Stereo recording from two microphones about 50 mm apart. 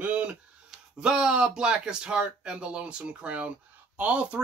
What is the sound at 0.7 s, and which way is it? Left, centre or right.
Speech, centre.